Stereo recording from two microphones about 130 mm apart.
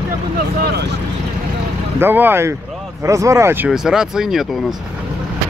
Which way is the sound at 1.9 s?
15° right (ahead or behind).